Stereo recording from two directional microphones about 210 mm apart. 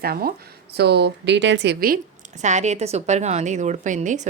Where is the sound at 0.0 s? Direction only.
45° right (ahead or behind).